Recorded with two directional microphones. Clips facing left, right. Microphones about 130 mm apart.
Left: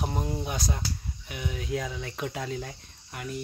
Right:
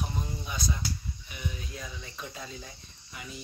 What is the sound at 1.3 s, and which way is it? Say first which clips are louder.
Speech: left 9 dB; 85° left.